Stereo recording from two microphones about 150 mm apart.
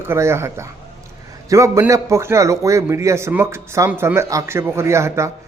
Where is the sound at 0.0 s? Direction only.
15° right (ahead or behind).